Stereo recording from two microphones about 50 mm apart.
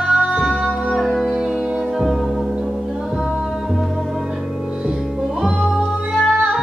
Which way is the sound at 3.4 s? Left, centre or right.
Centre.